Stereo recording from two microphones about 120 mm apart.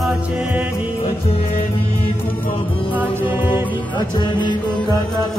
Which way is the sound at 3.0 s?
15° right (ahead or behind).